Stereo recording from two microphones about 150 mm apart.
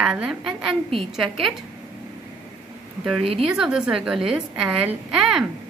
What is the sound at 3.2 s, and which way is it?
Speech, 40° right (ahead or behind).